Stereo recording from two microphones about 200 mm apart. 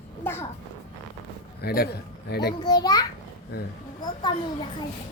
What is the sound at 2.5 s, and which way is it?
A child's voice, 20° left (ahead or behind).